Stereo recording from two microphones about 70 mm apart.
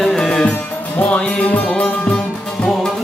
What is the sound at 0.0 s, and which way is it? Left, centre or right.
Music, centre.